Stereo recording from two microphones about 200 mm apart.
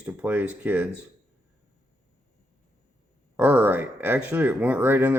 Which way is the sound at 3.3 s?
10° right (ahead or behind).